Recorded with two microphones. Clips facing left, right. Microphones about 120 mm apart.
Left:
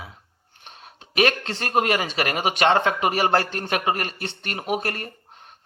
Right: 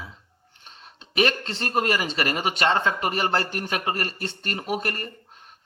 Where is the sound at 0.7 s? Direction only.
55° left (ahead or behind).